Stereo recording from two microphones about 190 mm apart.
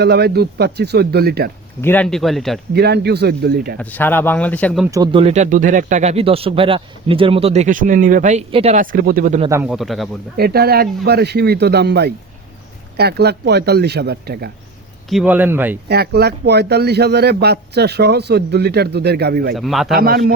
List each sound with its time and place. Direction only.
0.0 s speech: 60° right (ahead or behind)
1.8 s speech: 10° left (ahead or behind)
2.7 s speech: 60° right (ahead or behind)
3.8 s speech: 10° left (ahead or behind)
4.9 s speech: 20° right (ahead or behind)
5.2 s speech: 35° right (ahead or behind)
9.5 s speech: 15° right (ahead or behind)
9.7 s speech: centre (ahead or behind)
10.3 s speech: 55° right (ahead or behind)
15.1 s speech: 5° right (ahead or behind)
15.9 s speech: 55° right (ahead or behind)
19.5 s speech: centre (ahead or behind)
20.0 s a man's voice: 55° right (ahead or behind)